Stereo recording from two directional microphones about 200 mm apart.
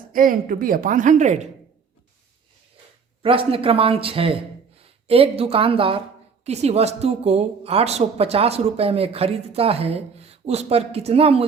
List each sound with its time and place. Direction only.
0.1 s a woman's voice: 45° right (ahead or behind)
3.2 s a woman's voice: 25° right (ahead or behind)